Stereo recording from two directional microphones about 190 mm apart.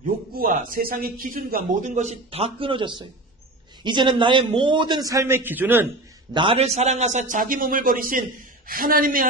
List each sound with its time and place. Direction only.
0.0 s a man's voice: 45° right (ahead or behind); by 5.9 s 10° right (ahead or behind)
6.3 s speech: 30° right (ahead or behind); by 9.3 s 50° right (ahead or behind)